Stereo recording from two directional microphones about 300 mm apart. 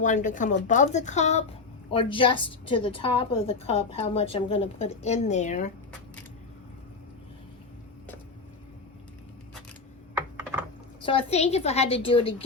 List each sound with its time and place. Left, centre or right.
0.0 s a woman's voice: left
11.0 s a woman's voice: centre